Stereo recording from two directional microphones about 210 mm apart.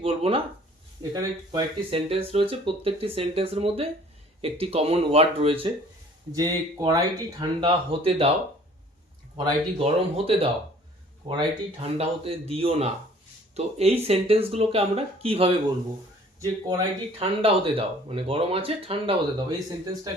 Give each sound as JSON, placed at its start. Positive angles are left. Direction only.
{"t": 0.0, "sound": "speech", "side_deg": -25}
{"t": 9.4, "sound": "speech", "side_deg": -25}
{"t": 16.4, "sound": "speech", "side_deg": -15}
{"t": 17.2, "sound": "speech", "side_deg": -25}